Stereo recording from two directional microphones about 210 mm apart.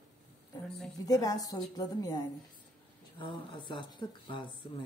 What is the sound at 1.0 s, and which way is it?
Speech, 15° left (ahead or behind).